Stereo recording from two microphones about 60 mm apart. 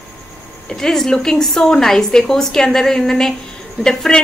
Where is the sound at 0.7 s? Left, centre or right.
Centre.